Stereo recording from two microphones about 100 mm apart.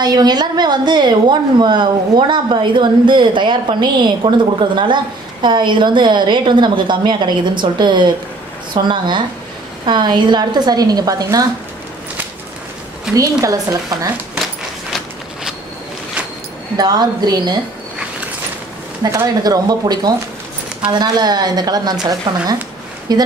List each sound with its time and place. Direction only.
0.0 s a woman's voice: 45° right (ahead or behind)
13.1 s a woman's voice: 35° right (ahead or behind)
16.7 s a woman's voice: 40° right (ahead or behind)
19.0 s a woman's voice: 35° right (ahead or behind)